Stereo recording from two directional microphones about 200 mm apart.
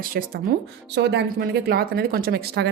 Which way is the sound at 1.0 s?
60° right (ahead or behind).